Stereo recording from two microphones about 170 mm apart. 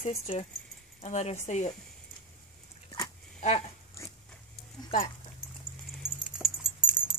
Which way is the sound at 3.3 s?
40° left (ahead or behind).